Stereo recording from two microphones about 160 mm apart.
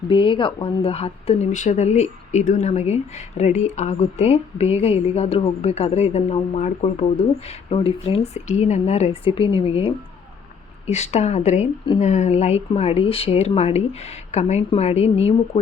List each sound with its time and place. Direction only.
0.1 s a woman's voice: 30° left (ahead or behind)